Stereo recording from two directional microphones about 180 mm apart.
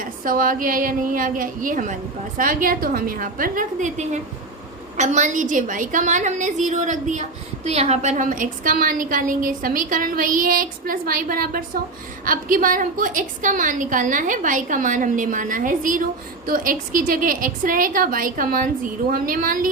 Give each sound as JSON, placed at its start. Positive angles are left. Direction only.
{"t": 0.0, "sound": "a woman's voice", "side_deg": -50}